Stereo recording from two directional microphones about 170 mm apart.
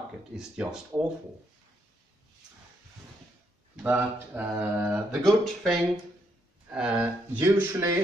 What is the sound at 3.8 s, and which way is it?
Speech, 10° right (ahead or behind).